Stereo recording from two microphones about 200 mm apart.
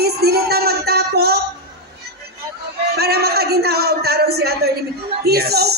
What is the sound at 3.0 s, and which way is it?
Speech, 50° right (ahead or behind).